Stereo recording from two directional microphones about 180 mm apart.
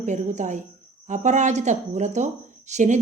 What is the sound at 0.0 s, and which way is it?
Speech, 40° right (ahead or behind).